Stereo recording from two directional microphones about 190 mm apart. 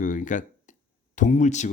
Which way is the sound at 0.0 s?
40° left (ahead or behind).